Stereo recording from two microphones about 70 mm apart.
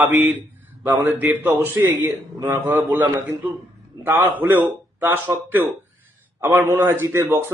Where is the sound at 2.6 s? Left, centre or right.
Right.